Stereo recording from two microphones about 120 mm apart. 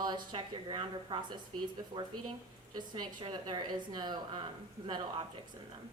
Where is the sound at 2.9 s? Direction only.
40° right (ahead or behind).